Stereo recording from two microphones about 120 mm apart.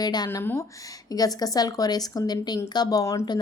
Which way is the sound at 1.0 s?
30° left (ahead or behind).